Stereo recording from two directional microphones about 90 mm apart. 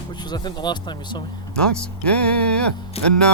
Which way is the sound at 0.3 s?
55° left (ahead or behind).